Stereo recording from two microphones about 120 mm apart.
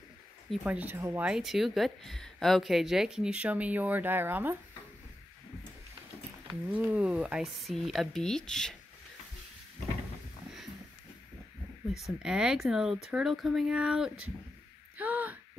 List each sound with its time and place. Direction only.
0.7 s speech: 15° right (ahead or behind)
1.2 s speech: 5° right (ahead or behind)
6.6 s speech: 15° right (ahead or behind); by 8.7 s 5° left (ahead or behind)
12.0 s speech: 5° right (ahead or behind)